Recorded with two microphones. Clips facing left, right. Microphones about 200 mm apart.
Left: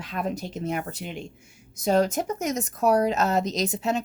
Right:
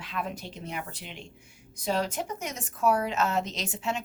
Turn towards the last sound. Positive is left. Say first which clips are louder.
# left 7 dB
turn(degrees=40)  # may be behind; listen again after turning